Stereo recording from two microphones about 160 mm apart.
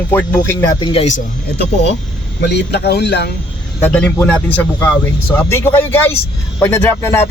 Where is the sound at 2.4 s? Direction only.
90° left.